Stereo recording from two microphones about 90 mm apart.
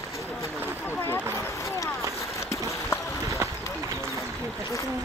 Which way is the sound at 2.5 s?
35° left (ahead or behind).